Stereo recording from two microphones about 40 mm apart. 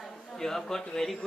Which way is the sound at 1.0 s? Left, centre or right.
Centre.